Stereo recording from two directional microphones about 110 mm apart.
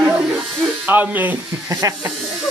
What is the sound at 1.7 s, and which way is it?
Speech, 30° right (ahead or behind).